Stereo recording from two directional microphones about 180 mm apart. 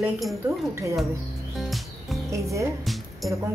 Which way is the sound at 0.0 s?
Centre (ahead or behind).